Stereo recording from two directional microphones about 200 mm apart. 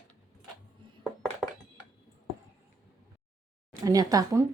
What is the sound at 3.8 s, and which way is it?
Speech, 15° right (ahead or behind).